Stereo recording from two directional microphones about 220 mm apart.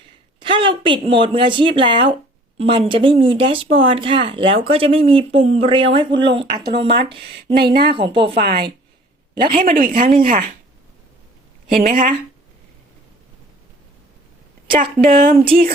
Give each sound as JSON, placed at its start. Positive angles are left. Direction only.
{"t": 0.3, "sound": "speech", "side_deg": -20}
{"t": 7.7, "sound": "speech", "side_deg": -45}
{"t": 7.9, "sound": "speech", "side_deg": -25}
{"t": 8.4, "sound": "speech", "side_deg": -45}
{"t": 11.8, "sound": "speech", "side_deg": -40}
{"t": 14.7, "sound": "speech", "side_deg": -40}